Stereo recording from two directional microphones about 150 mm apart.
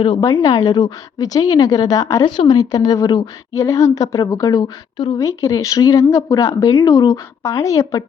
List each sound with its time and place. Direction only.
0.0 s a woman's voice: 35° left (ahead or behind)